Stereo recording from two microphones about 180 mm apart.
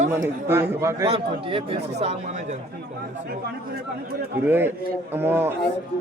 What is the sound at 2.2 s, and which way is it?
Speech, 45° right (ahead or behind).